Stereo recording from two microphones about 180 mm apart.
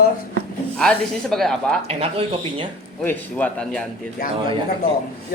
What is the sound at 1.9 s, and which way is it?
Speech, 30° right (ahead or behind).